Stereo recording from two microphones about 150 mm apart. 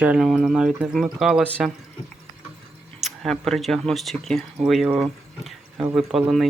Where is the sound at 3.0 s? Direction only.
Centre (ahead or behind).